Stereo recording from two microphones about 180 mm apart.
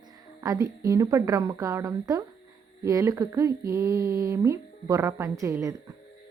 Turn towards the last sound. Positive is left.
turn(degrees=-15)  # may be behind; listen again after turning